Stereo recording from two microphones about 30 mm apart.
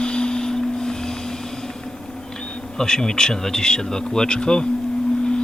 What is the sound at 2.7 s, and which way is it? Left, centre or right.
Speech, left.